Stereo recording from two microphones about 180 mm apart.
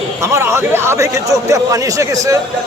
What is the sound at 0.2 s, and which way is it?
A man's voice, 15° right (ahead or behind).